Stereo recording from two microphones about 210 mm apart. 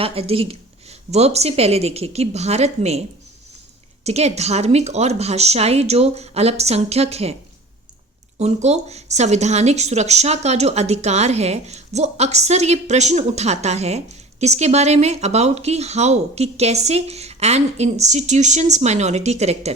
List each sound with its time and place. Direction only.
0.0 s a woman's voice: 30° right (ahead or behind)
4.0 s a woman's voice: 30° right (ahead or behind)
8.4 s a woman's voice: 30° right (ahead or behind)